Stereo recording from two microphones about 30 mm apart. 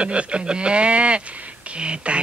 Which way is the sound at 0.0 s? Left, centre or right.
Right.